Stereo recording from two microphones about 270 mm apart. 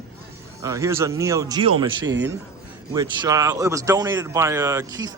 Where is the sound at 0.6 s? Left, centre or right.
Centre.